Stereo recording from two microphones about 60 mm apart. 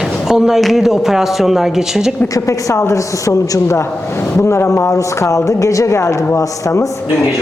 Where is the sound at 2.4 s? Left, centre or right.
Left.